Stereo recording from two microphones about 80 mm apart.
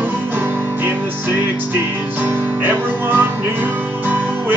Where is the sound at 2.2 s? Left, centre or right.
Right.